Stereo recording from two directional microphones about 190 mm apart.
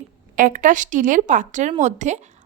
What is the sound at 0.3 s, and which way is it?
A woman's voice, 45° right (ahead or behind).